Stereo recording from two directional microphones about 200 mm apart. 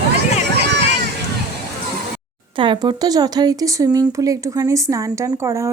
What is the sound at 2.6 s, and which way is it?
Speech, 25° right (ahead or behind).